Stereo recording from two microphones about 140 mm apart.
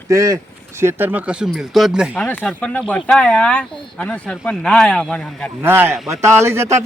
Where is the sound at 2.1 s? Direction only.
15° left (ahead or behind).